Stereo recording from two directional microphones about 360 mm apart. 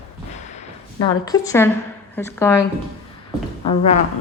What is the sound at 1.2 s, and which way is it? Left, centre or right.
A woman's voice, centre.